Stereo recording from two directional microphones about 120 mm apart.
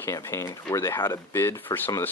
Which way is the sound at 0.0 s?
20° left (ahead or behind).